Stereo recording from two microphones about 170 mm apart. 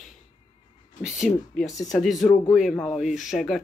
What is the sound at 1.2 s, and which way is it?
Speech, 5° left (ahead or behind).